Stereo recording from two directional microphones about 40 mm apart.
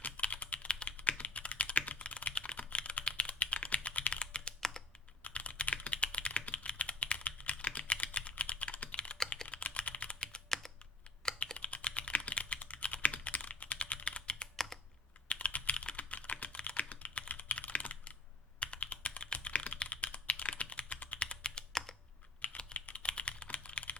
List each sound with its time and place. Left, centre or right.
0.0 s typing: left
11.5 s typing: left
14.5 s computer keyboard: centre
15.3 s typing: left
18.6 s computer keyboard: left
21.7 s computer keyboard: centre
22.5 s typing: left